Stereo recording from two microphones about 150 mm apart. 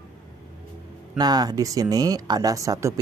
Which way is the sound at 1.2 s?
25° right (ahead or behind).